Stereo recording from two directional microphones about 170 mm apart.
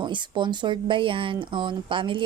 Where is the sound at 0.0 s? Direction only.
25° right (ahead or behind).